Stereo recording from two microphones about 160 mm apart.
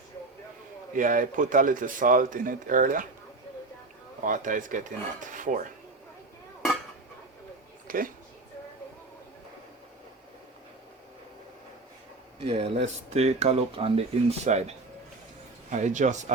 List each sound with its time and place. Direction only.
0.9 s speech: 55° right (ahead or behind)
4.2 s speech: 55° right (ahead or behind)
7.9 s speech: 60° right (ahead or behind)
12.5 s speech: 40° right (ahead or behind)